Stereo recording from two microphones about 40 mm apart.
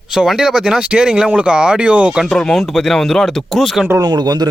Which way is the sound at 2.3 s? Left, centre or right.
Centre.